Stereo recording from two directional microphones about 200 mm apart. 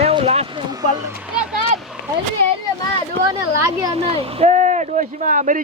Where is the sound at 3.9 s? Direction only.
30° right (ahead or behind).